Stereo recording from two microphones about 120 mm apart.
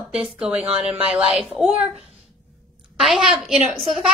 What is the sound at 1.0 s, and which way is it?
Speech, 50° right (ahead or behind).